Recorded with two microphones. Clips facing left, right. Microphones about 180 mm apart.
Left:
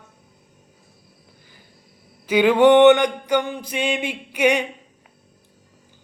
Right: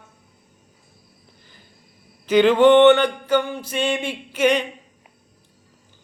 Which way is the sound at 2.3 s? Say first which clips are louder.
Right 1 dB; 10° left (ahead or behind).